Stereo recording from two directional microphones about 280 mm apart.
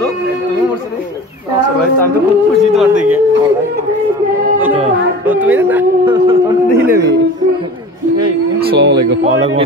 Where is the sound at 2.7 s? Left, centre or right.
Centre.